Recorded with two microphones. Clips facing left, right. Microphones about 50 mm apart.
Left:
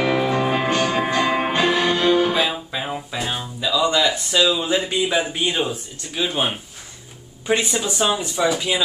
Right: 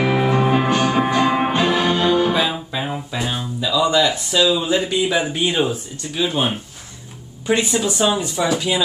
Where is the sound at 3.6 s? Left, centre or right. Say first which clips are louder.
Right 2 dB; centre.